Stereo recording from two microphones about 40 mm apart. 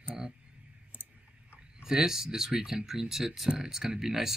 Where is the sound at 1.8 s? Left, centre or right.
Centre.